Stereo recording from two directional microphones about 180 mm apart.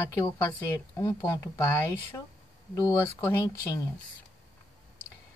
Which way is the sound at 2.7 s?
15° left (ahead or behind).